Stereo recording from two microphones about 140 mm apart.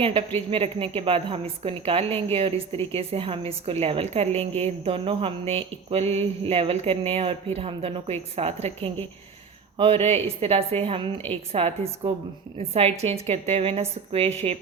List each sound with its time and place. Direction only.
0.0 s a woman's voice: 40° right (ahead or behind)
4.4 s mantra: 45° right (ahead or behind)